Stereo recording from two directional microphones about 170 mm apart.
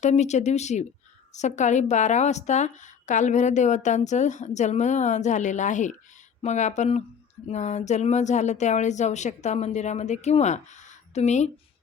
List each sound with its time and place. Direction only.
0.0 s a woman's voice: 40° left (ahead or behind)